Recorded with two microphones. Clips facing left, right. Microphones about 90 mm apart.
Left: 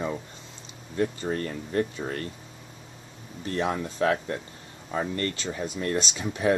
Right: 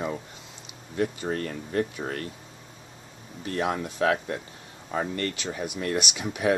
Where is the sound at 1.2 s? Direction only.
5° right (ahead or behind).